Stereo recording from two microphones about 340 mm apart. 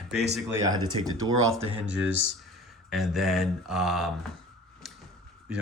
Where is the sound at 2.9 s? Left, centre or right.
Centre.